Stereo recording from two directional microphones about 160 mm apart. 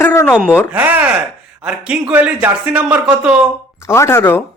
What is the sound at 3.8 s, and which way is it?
Speech, 15° left (ahead or behind).